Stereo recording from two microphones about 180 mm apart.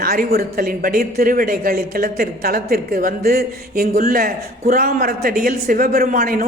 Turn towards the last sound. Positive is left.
turn(degrees=-55)  # may be behind; listen again after turning